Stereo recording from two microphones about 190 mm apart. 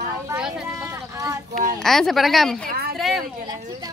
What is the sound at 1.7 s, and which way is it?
Speech, centre (ahead or behind).